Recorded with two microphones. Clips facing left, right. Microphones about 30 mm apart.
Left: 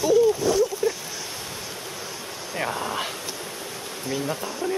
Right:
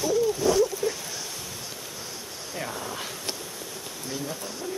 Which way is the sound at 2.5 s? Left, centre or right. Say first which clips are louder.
Left 7 dB; left.